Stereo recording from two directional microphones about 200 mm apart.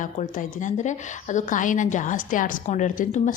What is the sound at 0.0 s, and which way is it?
A woman's voice, 40° left (ahead or behind).